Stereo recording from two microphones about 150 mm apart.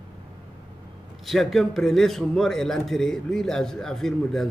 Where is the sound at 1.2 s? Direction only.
Centre (ahead or behind).